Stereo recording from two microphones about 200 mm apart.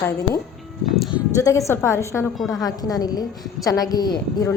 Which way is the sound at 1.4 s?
15° left (ahead or behind).